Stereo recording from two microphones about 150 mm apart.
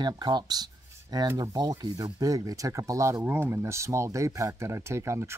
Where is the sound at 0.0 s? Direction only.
30° right (ahead or behind).